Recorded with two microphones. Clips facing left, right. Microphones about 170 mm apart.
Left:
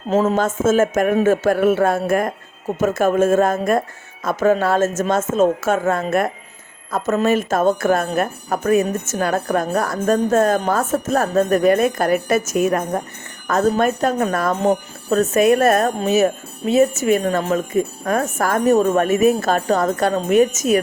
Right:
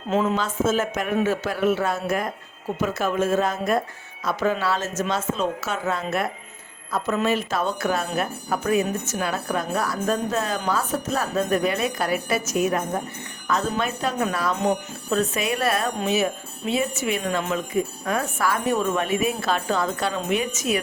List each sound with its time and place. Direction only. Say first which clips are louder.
0.1 s speech: left 6 dB; 40° left (ahead or behind)